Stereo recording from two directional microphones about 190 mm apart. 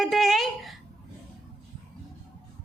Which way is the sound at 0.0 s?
Centre (ahead or behind).